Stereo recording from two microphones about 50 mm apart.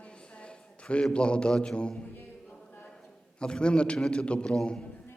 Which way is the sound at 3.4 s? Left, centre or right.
Centre.